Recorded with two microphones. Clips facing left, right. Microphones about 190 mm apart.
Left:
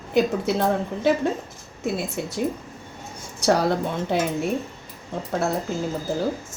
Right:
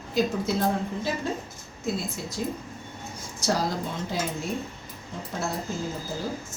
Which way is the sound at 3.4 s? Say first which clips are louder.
Left 7 dB; 65° left (ahead or behind).